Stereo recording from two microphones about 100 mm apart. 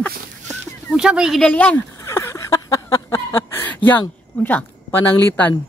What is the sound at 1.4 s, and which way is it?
Speech, 15° left (ahead or behind).